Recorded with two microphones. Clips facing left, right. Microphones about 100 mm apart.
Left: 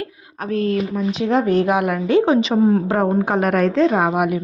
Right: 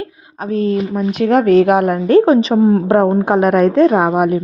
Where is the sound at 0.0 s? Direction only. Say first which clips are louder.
Right 3 dB; 25° right (ahead or behind).